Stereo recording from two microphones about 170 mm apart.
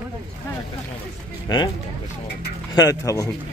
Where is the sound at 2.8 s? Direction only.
20° left (ahead or behind).